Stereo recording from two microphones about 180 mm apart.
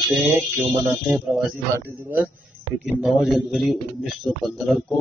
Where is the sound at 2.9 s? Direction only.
5° right (ahead or behind).